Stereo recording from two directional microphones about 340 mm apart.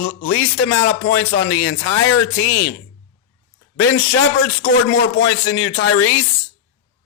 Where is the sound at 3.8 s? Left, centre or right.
Left.